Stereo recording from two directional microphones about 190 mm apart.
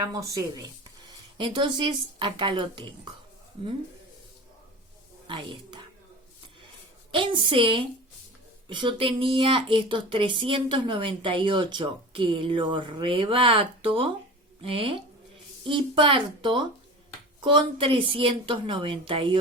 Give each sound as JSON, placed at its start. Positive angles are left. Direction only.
{"t": 0.0, "sound": "speech", "side_deg": -20}
{"t": 5.3, "sound": "speech", "side_deg": -25}
{"t": 7.1, "sound": "speech", "side_deg": -25}